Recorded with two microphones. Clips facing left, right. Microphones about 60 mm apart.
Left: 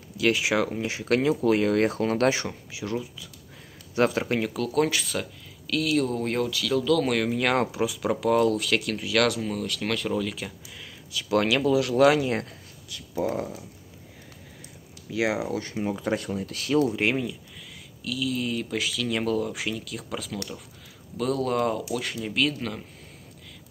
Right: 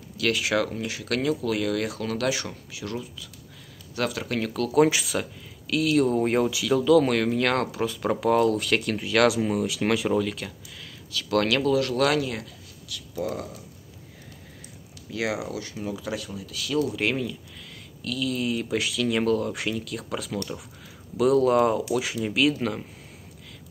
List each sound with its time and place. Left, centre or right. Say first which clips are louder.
0.2 s speech: left 1 dB; left
2.4 s speech: left 2 dB; left
4.4 s speech: right 1 dB; centre
4.7 s speech: right 5 dB; centre
7.1 s speech: right 1 dB; centre
11.1 s speech: even; centre
15.1 s speech: left 3 dB; left
15.5 s speech: left 3 dB; left
16.9 s speech: left 1 dB; centre
18.0 s speech: right 1 dB; centre